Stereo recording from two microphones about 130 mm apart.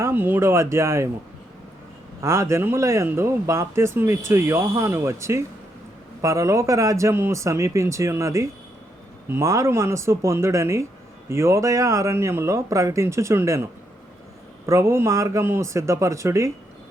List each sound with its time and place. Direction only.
0.0 s speech: 15° right (ahead or behind)
2.2 s speech: 20° right (ahead or behind)
14.7 s speech: 20° right (ahead or behind)